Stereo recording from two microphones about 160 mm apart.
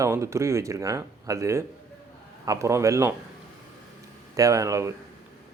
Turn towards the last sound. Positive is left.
turn(degrees=-20)  # may be behind; listen again after turning